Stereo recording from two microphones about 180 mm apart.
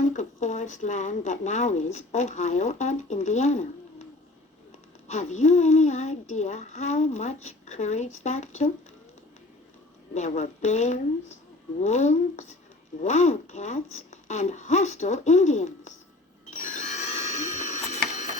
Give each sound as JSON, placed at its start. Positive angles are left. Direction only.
{"t": 0.1, "sound": "speech", "side_deg": 40}
{"t": 5.0, "sound": "speech", "side_deg": 40}
{"t": 10.2, "sound": "speech", "side_deg": 40}
{"t": 16.6, "sound": "a sound", "side_deg": 45}